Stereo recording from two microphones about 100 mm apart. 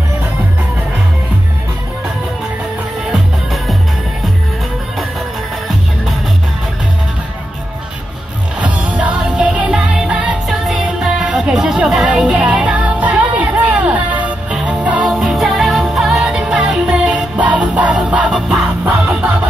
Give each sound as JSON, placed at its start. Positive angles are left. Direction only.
{"t": 8.5, "sound": "music", "side_deg": -15}